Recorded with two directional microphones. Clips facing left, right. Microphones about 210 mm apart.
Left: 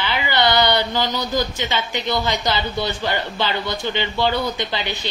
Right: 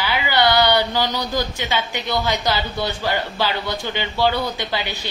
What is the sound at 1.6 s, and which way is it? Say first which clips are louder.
Speech: left 1 dB; 15° right (ahead or behind).